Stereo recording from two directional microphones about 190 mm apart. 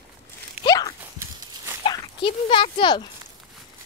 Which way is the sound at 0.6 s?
20° left (ahead or behind).